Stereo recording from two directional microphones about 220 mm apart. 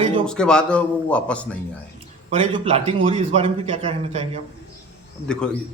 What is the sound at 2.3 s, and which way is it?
A man's voice, 25° right (ahead or behind).